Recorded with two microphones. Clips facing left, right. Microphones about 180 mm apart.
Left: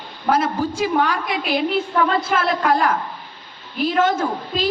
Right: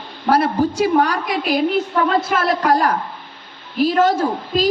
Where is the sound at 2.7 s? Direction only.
40° right (ahead or behind).